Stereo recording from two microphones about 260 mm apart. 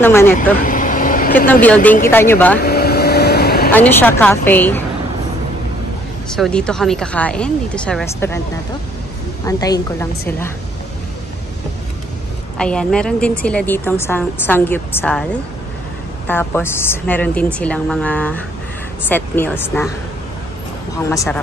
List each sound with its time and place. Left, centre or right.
0.0 s a woman's voice: centre
0.6 s vehicle: left
1.5 s a woman's voice: centre
2.6 s vehicle: left
3.7 s a woman's voice: centre
6.3 s a woman's voice: centre
9.5 s a woman's voice: centre
12.5 s a woman's voice: centre
16.3 s a woman's voice: centre
21.1 s a woman's voice: centre